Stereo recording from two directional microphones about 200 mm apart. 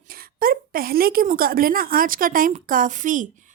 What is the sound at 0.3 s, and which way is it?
Speech, 45° right (ahead or behind).